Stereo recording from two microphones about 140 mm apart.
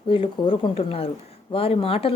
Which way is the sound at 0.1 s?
40° left (ahead or behind).